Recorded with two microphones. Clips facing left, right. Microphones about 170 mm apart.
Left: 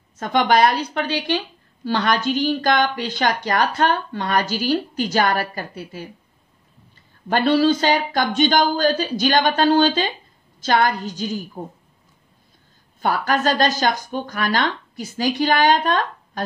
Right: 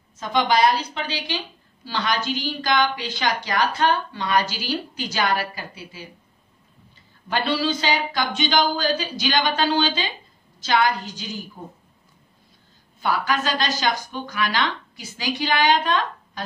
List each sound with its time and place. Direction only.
0.2 s a woman's voice: 55° left (ahead or behind)
7.2 s speech: 50° left (ahead or behind)
13.0 s speech: 50° left (ahead or behind)